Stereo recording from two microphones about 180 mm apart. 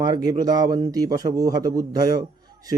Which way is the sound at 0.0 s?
20° right (ahead or behind).